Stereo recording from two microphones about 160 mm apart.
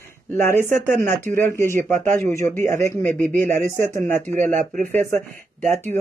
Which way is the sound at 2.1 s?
15° left (ahead or behind).